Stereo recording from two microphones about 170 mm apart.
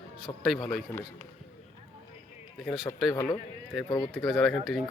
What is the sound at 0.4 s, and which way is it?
Speech, centre (ahead or behind).